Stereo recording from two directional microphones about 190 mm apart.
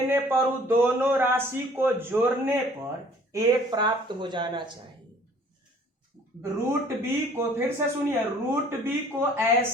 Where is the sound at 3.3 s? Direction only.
20° right (ahead or behind).